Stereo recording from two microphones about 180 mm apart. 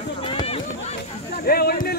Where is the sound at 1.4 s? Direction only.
60° left (ahead or behind).